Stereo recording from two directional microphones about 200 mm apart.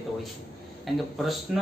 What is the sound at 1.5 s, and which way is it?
Speech, centre (ahead or behind).